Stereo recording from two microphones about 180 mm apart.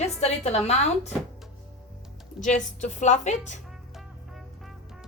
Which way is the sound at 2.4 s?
40° left (ahead or behind).